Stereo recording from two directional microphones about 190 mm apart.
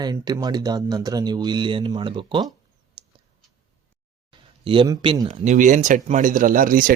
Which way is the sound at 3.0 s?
25° right (ahead or behind).